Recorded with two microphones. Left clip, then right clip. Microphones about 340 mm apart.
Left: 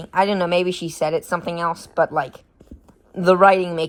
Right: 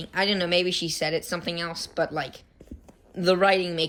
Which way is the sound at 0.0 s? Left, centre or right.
Centre.